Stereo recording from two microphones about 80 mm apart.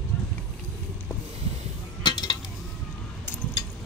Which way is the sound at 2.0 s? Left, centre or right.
Left.